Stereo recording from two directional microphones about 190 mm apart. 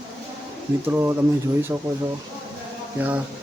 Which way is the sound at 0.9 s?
15° right (ahead or behind).